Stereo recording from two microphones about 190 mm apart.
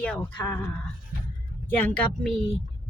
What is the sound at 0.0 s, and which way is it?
Speech, 5° left (ahead or behind).